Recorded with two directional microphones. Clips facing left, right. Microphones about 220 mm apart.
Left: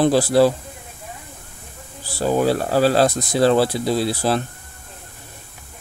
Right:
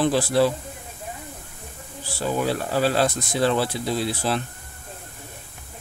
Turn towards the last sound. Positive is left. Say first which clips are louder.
# left 5 dB
turn(degrees=40)  # may be behind; listen again after turning